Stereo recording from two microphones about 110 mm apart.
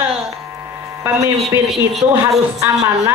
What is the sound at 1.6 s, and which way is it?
Speech, centre (ahead or behind).